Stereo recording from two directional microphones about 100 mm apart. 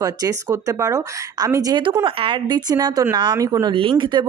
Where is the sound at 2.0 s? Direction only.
55° right (ahead or behind); by 3.7 s 40° right (ahead or behind).